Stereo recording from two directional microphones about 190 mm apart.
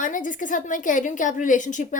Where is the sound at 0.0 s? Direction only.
45° left (ahead or behind).